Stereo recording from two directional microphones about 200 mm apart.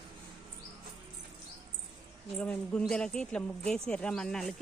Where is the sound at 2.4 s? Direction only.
5° left (ahead or behind).